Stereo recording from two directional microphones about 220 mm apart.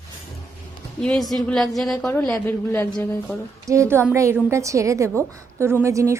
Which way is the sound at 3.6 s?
15° right (ahead or behind).